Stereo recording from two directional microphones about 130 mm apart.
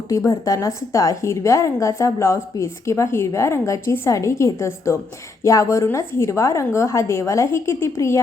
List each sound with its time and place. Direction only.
0.3 s a woman's voice: 25° left (ahead or behind)